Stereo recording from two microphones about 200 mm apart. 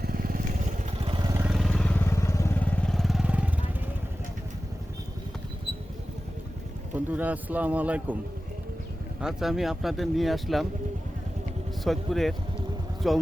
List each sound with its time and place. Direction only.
0.0 s vehicle: 45° right (ahead or behind)
1.3 s vehicle: 5° right (ahead or behind); by 2.6 s 15° left (ahead or behind)
2.9 s vehicle: centre (ahead or behind)
6.9 s a man's voice: 10° right (ahead or behind)
9.2 s speech: centre (ahead or behind)
11.9 s speech: centre (ahead or behind)